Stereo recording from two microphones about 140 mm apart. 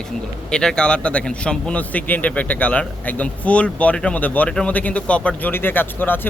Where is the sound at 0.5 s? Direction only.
5° left (ahead or behind).